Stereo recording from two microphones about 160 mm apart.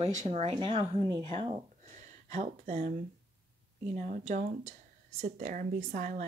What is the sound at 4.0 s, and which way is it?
Speech, 55° right (ahead or behind).